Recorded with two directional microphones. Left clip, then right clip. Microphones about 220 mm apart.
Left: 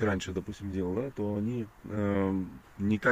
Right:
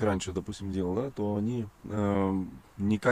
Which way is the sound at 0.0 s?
15° right (ahead or behind).